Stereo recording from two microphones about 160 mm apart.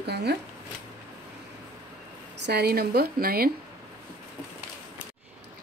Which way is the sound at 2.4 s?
85° right.